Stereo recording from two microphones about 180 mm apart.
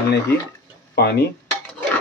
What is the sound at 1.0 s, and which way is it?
Speech, 60° left (ahead or behind).